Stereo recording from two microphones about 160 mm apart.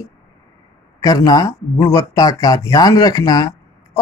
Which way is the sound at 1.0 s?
25° left (ahead or behind).